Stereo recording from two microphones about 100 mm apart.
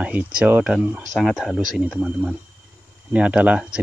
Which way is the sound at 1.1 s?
Centre (ahead or behind).